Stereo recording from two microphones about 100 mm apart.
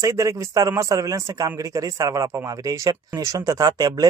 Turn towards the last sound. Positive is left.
turn(degrees=-35)  # may be behind; listen again after turning